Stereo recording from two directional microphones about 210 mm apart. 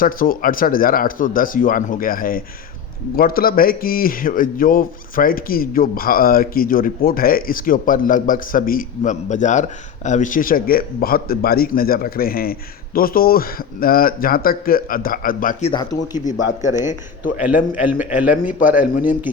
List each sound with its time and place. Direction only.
0.0 s speech: 40° left (ahead or behind)
17.2 s speech: 40° left (ahead or behind)
17.8 s a man's voice: 10° right (ahead or behind)
18.3 s speech: 40° left (ahead or behind)